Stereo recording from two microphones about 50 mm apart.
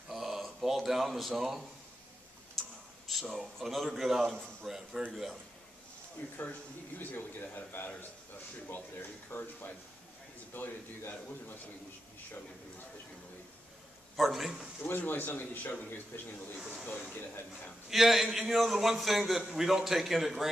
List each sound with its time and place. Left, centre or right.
0.1 s a sound: centre
2.6 s tick: centre
3.1 s a man's voice: centre
6.9 s speech: left
14.1 s a man's voice: centre
14.8 s speech: left
16.5 s speech: centre
17.8 s a man's voice: centre